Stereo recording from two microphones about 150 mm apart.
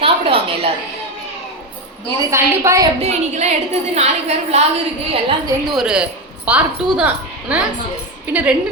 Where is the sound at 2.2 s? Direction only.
20° right (ahead or behind).